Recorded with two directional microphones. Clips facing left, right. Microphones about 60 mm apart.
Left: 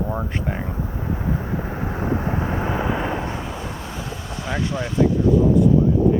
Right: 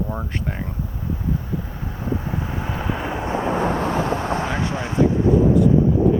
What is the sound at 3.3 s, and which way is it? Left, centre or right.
Vehicle, right.